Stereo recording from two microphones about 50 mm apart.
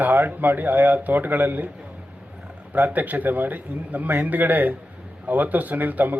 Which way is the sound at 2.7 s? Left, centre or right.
Right.